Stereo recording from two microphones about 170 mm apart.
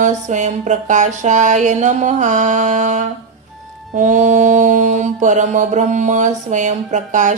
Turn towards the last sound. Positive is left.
turn(degrees=-45)  # may be behind; listen again after turning